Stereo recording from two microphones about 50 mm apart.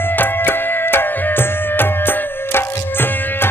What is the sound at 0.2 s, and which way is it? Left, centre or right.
Tabla, left.